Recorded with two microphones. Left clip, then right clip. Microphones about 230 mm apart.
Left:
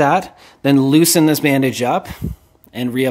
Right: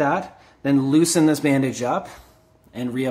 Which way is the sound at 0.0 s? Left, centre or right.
Left.